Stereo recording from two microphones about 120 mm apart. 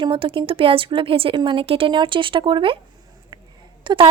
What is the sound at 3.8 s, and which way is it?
Speech, 45° right (ahead or behind).